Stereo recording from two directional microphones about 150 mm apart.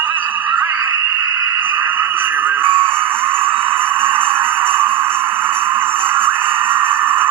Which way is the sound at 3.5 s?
35° right (ahead or behind).